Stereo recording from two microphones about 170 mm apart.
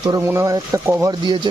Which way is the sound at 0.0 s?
20° right (ahead or behind).